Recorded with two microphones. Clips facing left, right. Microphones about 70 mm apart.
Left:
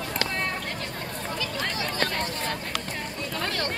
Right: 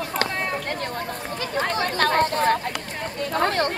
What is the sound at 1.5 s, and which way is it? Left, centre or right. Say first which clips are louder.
Chatter: right 10 dB; right.